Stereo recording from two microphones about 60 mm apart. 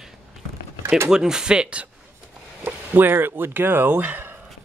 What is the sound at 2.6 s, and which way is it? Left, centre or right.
Speech, right.